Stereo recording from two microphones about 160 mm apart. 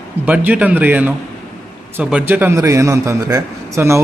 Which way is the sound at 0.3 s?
10° right (ahead or behind).